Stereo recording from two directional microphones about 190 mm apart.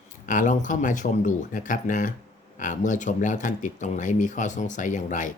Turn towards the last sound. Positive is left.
turn(degrees=40)  # may be behind; listen again after turning